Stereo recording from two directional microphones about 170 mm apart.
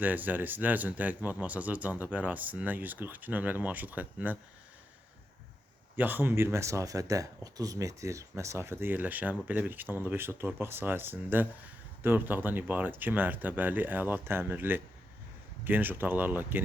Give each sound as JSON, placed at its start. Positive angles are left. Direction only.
{"t": 0.0, "sound": "speech", "side_deg": -10}
{"t": 6.0, "sound": "speech", "side_deg": -10}